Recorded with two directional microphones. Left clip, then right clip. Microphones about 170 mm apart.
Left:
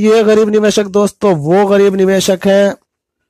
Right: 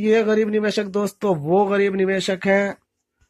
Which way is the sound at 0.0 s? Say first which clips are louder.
Left 9 dB; 45° left (ahead or behind).